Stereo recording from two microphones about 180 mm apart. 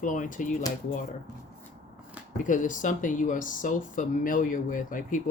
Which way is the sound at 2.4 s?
45° left (ahead or behind).